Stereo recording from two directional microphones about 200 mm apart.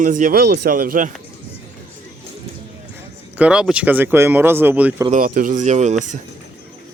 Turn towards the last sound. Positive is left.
turn(degrees=-35)  # may be behind; listen again after turning